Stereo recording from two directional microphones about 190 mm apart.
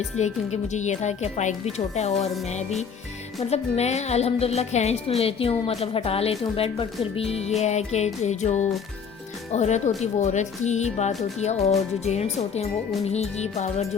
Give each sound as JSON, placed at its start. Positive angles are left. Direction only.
{"t": 0.2, "sound": "speech", "side_deg": 35}